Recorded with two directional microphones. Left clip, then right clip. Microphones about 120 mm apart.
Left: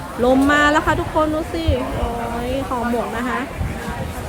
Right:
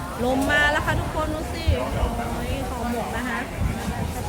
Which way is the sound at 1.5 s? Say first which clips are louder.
Left 7 dB; 20° left (ahead or behind).